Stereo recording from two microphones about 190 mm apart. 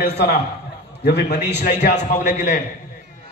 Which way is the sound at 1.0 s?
60° left (ahead or behind).